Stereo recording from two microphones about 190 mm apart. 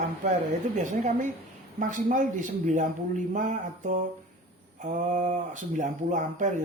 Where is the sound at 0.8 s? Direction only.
40° right (ahead or behind).